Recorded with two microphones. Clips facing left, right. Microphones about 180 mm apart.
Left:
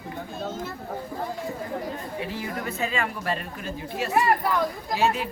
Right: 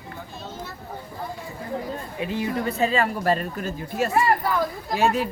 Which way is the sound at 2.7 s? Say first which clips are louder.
Right 5 dB; 35° right (ahead or behind).